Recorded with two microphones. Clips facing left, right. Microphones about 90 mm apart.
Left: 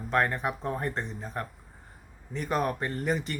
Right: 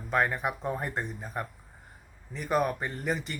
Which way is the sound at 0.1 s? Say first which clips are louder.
Left 1 dB; 5° right (ahead or behind).